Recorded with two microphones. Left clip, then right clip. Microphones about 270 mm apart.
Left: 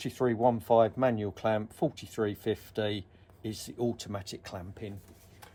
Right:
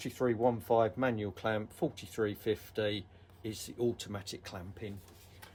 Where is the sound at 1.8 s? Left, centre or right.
Left.